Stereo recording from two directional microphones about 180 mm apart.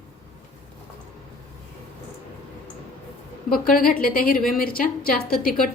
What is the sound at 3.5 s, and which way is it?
A woman's voice, 50° left (ahead or behind).